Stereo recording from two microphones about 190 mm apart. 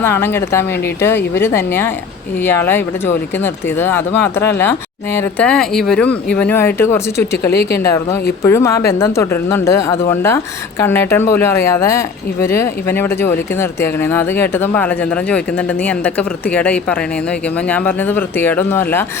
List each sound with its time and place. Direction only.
0.0 s speech: 10° left (ahead or behind)
7.2 s speech: 55° left (ahead or behind)
7.8 s speech: 15° left (ahead or behind)